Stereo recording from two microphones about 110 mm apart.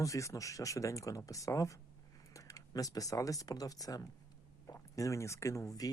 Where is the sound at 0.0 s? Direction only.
30° left (ahead or behind).